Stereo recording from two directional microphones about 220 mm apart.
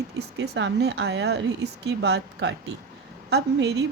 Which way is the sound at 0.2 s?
50° right (ahead or behind).